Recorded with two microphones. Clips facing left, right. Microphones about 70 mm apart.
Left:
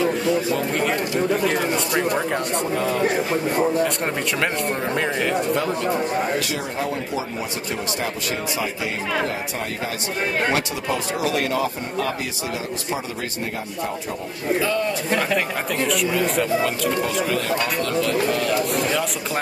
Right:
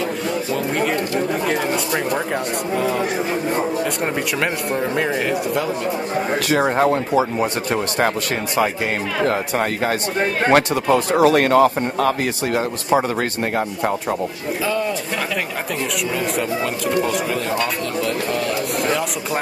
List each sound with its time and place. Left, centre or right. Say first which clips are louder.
0.0 s speech: left 2 dB; centre
2.8 s speech: right 1 dB; centre
6.5 s speech: right 9 dB; right
10.5 s speech: right 8 dB; right
16.2 s speech: even; centre